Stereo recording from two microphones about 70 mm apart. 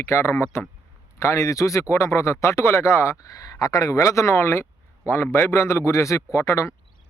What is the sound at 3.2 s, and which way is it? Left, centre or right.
Speech, left.